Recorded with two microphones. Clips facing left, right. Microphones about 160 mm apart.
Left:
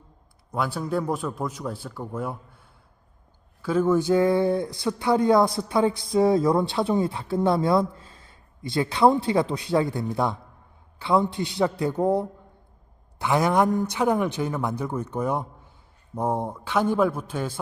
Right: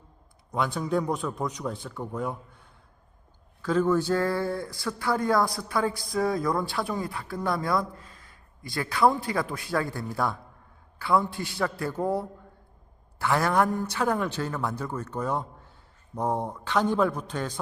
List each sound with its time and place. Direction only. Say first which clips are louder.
0.5 s a man's voice: even; 5° left (ahead or behind)